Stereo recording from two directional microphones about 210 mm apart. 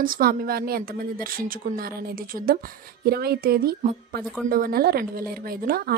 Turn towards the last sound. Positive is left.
turn(degrees=-45)  # may be behind; listen again after turning